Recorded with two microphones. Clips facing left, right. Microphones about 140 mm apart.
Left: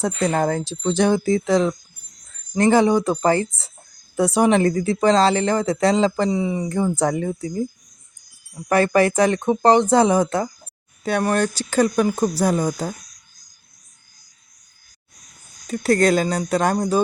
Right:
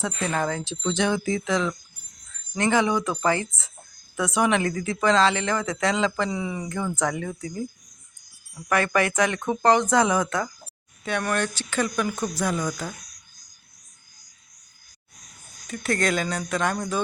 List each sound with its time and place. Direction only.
0.0 s speech: 40° left (ahead or behind)
6.3 s speech: 25° left (ahead or behind)
6.7 s speech: 35° left (ahead or behind)
8.7 s speech: 35° left (ahead or behind)
15.6 s speech: 35° left (ahead or behind)